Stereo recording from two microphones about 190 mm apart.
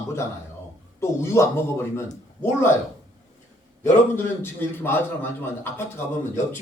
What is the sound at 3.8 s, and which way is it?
A man's voice, 10° left (ahead or behind).